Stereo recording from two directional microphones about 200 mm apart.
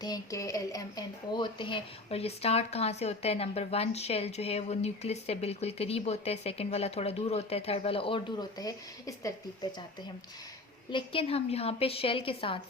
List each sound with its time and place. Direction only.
0.0 s a woman's voice: 20° left (ahead or behind)
10.9 s speech: 25° left (ahead or behind)